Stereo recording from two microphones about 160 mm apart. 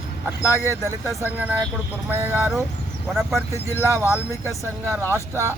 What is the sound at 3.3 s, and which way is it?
Speech, 15° right (ahead or behind).